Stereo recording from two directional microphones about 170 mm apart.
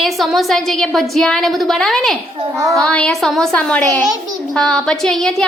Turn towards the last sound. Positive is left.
turn(degrees=5)  # may be behind; listen again after turning